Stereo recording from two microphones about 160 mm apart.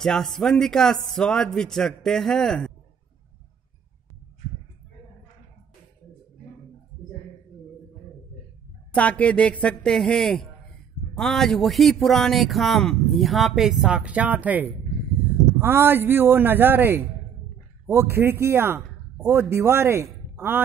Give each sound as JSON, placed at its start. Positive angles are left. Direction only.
{"t": 0.0, "sound": "speech", "side_deg": 0}
{"t": 8.9, "sound": "a woman's voice", "side_deg": 10}